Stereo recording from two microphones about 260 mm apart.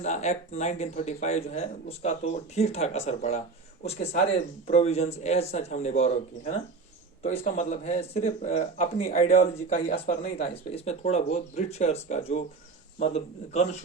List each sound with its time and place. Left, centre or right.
0.0 s speech: left
4.7 s speech: left